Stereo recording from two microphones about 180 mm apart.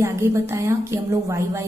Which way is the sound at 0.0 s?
15° right (ahead or behind).